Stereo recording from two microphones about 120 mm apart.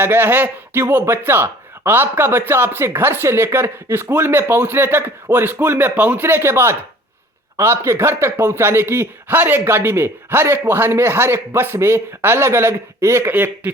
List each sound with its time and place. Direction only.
0.0 s a man's voice: 20° right (ahead or behind)